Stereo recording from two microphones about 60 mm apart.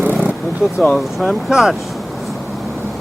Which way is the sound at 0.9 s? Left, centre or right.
Centre.